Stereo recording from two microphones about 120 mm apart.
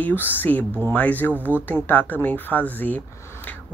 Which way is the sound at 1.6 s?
15° left (ahead or behind).